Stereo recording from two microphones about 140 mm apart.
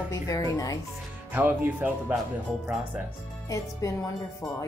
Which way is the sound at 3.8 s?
25° left (ahead or behind).